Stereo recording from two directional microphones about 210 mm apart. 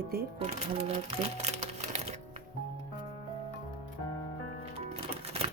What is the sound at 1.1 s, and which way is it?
Music, 30° right (ahead or behind).